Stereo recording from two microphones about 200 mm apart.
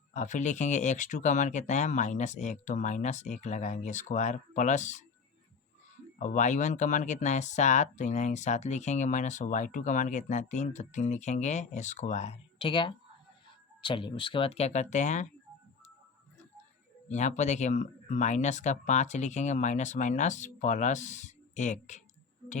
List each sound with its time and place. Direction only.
0.1 s speech: 40° left (ahead or behind)
6.1 s speech: 40° left (ahead or behind)
17.1 s speech: 35° left (ahead or behind)